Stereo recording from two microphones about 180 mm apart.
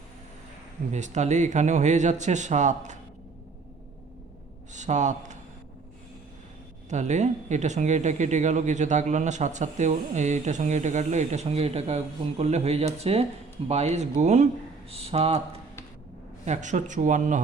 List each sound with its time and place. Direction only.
0.9 s speech: 40° right (ahead or behind)
4.7 s a man's voice: 40° right (ahead or behind)
6.9 s speech: 40° right (ahead or behind)